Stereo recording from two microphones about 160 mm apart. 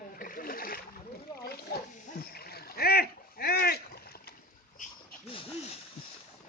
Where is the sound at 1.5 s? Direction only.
75° left (ahead or behind).